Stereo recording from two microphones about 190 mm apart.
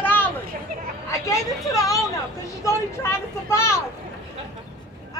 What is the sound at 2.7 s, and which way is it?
Speech, 15° left (ahead or behind).